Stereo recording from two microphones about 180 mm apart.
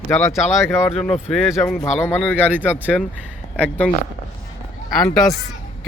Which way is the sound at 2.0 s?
10° left (ahead or behind).